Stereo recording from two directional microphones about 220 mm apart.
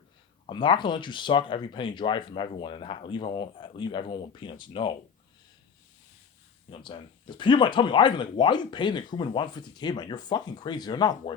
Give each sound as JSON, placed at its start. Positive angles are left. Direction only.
{"t": 0.4, "sound": "speech", "side_deg": 20}
{"t": 6.7, "sound": "speech", "side_deg": 25}